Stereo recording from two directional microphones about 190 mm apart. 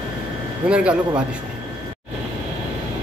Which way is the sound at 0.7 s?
5° right (ahead or behind).